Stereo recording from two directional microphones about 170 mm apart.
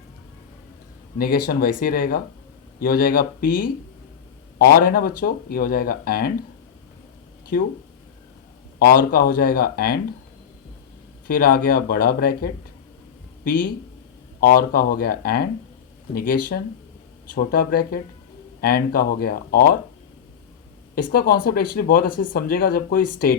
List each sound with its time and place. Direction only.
1.2 s speech: 60° left (ahead or behind)
8.8 s speech: 60° left (ahead or behind)
11.3 s speech: 60° left (ahead or behind)
20.9 s speech: 60° left (ahead or behind)